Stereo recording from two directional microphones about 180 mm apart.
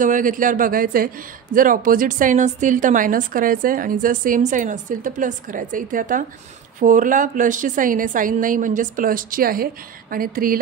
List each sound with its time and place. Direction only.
0.0 s speech: 45° right (ahead or behind)